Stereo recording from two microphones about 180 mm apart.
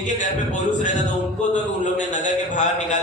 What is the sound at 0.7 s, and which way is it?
A man's voice, 45° left (ahead or behind).